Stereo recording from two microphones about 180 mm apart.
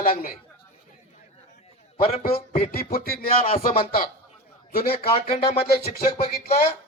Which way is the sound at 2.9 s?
55° left (ahead or behind).